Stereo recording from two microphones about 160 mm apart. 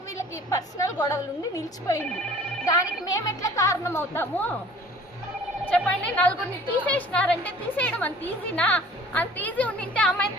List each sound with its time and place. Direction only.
0.2 s speech: 20° left (ahead or behind)
5.7 s a woman's voice: 10° left (ahead or behind)